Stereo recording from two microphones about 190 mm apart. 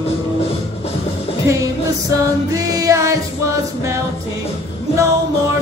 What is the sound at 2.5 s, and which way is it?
Music, 20° right (ahead or behind).